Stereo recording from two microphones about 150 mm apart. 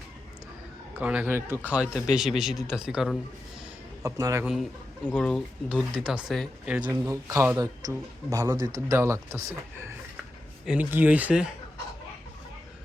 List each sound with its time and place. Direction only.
0.9 s speech: 10° right (ahead or behind)
4.0 s speech: 20° right (ahead or behind)
5.1 s speech: 5° left (ahead or behind)
5.6 s speech: 5° right (ahead or behind)
7.0 s speech: 20° right (ahead or behind)
10.7 s speech: 10° right (ahead or behind)